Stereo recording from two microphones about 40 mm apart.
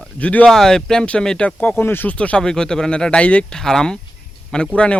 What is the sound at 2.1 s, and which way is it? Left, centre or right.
Speech, left.